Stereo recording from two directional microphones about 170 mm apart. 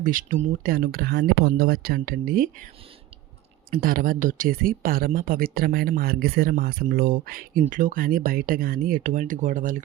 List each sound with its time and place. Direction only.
0.0 s speech: 55° right (ahead or behind)
3.7 s speech: 55° right (ahead or behind)